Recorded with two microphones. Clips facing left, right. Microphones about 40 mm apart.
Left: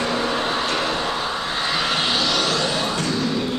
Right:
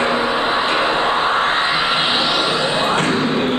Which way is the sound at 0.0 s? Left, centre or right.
Right.